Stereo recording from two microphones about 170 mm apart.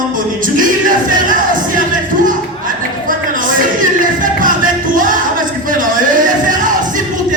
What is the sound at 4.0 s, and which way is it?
Music, 50° right (ahead or behind).